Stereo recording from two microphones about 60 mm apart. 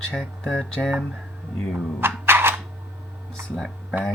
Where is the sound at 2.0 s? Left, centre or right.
Right.